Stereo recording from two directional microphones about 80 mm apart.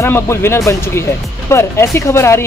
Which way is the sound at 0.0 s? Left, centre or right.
Left.